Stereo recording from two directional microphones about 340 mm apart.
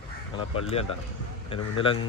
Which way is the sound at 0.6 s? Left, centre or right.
Centre.